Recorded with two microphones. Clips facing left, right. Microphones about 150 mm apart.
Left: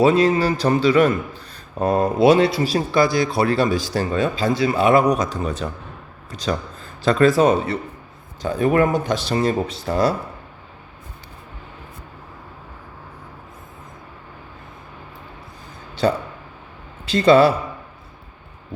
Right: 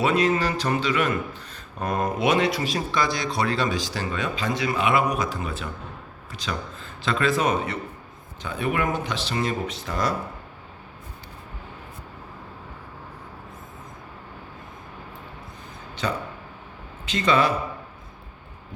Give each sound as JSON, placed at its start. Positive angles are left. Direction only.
{"t": 0.0, "sound": "a man's voice", "side_deg": 30}
{"t": 16.0, "sound": "a man's voice", "side_deg": 35}